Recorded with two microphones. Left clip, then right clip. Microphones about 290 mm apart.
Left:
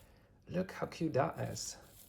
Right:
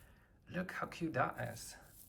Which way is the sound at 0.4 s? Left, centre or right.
Centre.